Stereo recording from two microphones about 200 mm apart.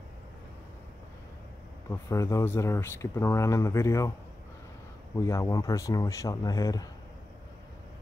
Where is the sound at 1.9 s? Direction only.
15° left (ahead or behind).